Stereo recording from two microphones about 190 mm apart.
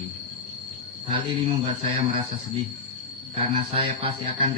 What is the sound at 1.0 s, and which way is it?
Speech, 25° right (ahead or behind).